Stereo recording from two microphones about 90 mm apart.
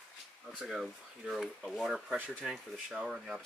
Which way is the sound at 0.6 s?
Centre (ahead or behind).